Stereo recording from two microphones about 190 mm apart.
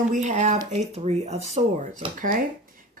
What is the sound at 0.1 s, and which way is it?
Speech, 40° right (ahead or behind).